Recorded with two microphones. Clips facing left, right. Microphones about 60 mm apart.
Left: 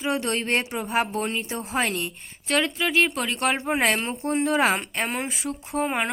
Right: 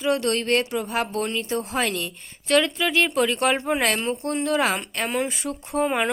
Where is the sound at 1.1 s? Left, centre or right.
Centre.